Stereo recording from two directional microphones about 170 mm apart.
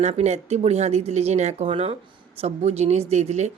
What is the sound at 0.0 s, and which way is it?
A woman's voice, 40° right (ahead or behind).